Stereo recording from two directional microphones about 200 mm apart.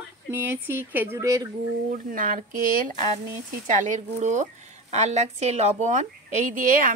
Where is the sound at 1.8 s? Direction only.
40° right (ahead or behind).